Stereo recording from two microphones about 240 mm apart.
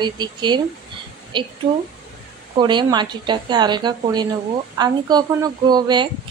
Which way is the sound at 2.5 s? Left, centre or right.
Centre.